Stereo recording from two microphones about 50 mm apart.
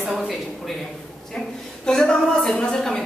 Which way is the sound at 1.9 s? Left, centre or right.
Centre.